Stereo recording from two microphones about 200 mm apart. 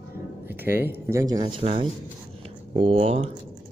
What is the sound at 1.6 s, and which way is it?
Speech, 30° right (ahead or behind).